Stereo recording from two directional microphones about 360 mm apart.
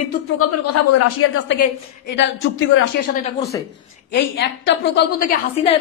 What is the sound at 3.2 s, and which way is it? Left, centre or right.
Speech, centre.